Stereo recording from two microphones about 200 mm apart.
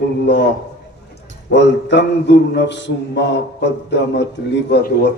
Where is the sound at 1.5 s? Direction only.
60° left (ahead or behind).